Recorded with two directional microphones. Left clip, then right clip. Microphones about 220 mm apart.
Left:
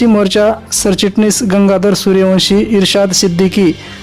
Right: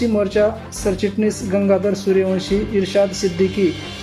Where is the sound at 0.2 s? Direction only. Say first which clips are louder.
Left 6 dB; 45° left (ahead or behind).